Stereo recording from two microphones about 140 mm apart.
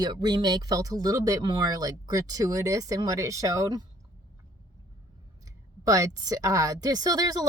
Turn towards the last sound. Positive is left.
turn(degrees=-25)  # may be behind; listen again after turning